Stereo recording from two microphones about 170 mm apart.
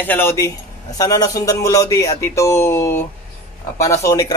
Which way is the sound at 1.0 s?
20° left (ahead or behind).